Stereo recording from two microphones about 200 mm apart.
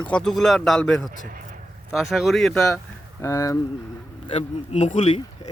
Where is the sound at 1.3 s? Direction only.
45° right (ahead or behind).